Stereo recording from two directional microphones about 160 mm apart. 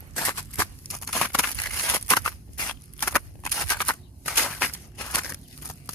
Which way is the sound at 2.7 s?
10° left (ahead or behind).